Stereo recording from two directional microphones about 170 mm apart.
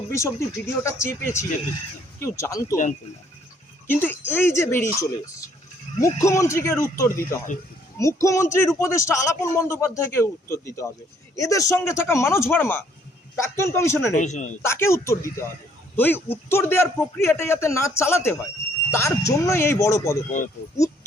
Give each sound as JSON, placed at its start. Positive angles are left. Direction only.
{"t": 0.1, "sound": "speech", "side_deg": 15}
{"t": 3.8, "sound": "speech", "side_deg": 10}
{"t": 14.1, "sound": "speech", "side_deg": 45}
{"t": 14.6, "sound": "speech", "side_deg": 15}